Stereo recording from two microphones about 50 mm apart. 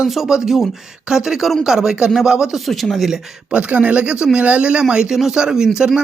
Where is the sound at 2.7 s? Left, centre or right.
Centre.